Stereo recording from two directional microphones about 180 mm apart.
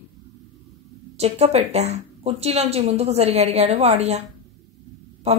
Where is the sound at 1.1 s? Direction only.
35° right (ahead or behind).